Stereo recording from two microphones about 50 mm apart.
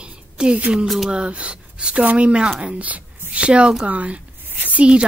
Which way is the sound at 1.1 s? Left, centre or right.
Right.